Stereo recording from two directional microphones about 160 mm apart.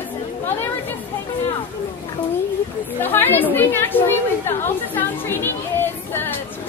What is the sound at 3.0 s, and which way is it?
Chatter, 10° left (ahead or behind).